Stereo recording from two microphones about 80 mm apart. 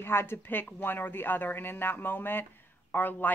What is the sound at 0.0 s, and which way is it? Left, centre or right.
A woman's voice, left.